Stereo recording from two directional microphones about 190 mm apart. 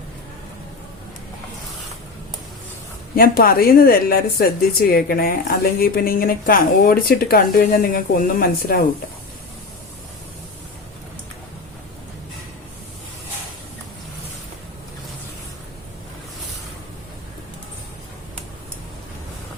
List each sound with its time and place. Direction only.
3.2 s a woman's voice: 50° left (ahead or behind)